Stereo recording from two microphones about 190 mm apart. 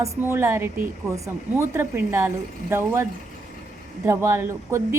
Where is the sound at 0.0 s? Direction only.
15° right (ahead or behind).